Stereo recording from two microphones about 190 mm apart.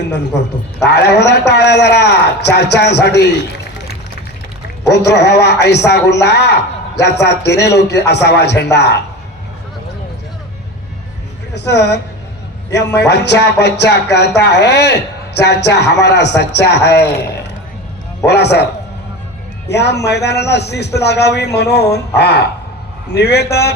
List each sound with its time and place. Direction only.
0.0 s a man's voice: 65° left (ahead or behind)
4.9 s a man's voice: 60° left (ahead or behind)
11.5 s a man's voice: 60° left (ahead or behind)